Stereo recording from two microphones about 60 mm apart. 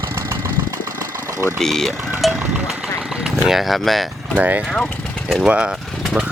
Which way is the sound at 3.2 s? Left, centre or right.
Centre.